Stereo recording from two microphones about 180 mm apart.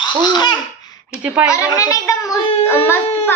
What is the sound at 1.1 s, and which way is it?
Speech, 5° right (ahead or behind).